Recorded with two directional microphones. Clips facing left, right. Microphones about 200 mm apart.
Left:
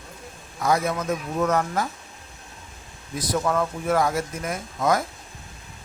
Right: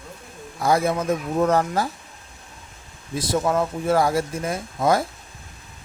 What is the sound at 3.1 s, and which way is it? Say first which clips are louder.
Speech: right 2 dB; 25° right (ahead or behind).